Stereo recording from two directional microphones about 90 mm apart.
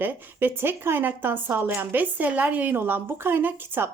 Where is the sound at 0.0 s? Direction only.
25° right (ahead or behind).